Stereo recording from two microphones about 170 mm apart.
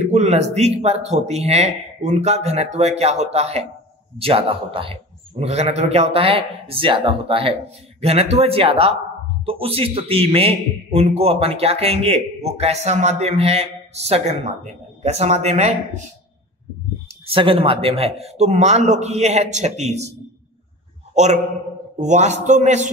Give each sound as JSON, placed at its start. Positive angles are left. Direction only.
{"t": 0.1, "sound": "a man's voice", "side_deg": -40}
{"t": 17.3, "sound": "a man's voice", "side_deg": -30}
{"t": 21.1, "sound": "a sound", "side_deg": -45}
{"t": 21.9, "sound": "a man's voice", "side_deg": -45}